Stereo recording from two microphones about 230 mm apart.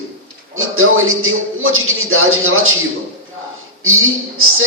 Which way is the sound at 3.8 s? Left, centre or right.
Right.